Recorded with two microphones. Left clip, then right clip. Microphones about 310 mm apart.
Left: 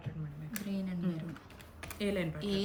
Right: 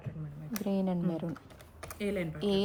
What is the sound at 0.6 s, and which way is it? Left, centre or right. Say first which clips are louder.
Speech: right 8 dB; centre.